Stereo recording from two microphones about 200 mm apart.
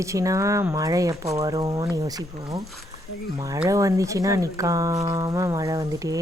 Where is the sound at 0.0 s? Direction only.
15° right (ahead or behind).